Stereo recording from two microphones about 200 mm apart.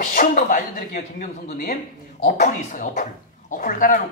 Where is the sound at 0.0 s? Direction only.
40° left (ahead or behind).